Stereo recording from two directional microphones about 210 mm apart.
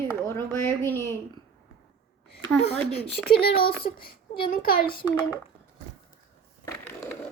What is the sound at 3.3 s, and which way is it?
Speech, 25° left (ahead or behind).